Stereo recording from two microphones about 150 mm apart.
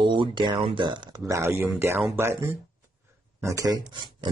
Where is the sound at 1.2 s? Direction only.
20° right (ahead or behind).